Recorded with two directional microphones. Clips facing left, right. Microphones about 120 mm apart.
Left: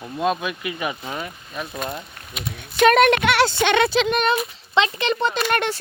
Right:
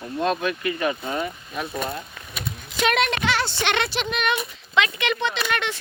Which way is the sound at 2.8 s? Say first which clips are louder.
Left 7 dB; 50° left (ahead or behind).